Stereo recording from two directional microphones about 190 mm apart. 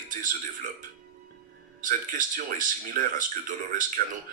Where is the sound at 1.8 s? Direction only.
45° right (ahead or behind).